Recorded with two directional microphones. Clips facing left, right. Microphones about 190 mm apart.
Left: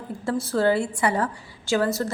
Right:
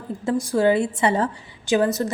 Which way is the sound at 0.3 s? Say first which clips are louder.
Right 3 dB; 15° right (ahead or behind).